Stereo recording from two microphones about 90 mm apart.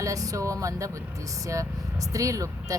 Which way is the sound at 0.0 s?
40° right (ahead or behind).